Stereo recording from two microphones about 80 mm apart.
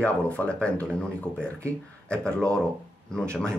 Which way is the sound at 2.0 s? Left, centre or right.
Centre.